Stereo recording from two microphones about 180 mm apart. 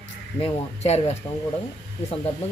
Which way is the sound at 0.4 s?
35° left (ahead or behind).